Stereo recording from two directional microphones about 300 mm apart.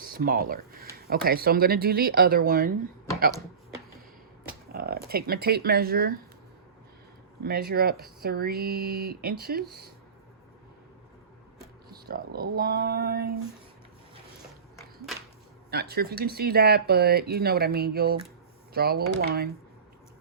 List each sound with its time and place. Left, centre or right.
0.0 s speech: right
4.7 s speech: right
7.4 s speech: right
11.9 s speech: right
15.7 s speech: right